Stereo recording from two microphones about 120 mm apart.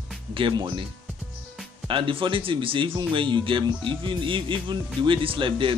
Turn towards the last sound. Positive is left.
turn(degrees=-45)  # may be behind; listen again after turning